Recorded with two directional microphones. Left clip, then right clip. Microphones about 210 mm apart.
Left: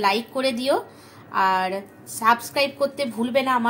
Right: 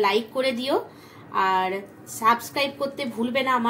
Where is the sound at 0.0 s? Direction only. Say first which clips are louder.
Even; 25° left (ahead or behind).